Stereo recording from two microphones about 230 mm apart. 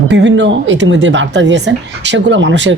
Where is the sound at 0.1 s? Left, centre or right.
Right.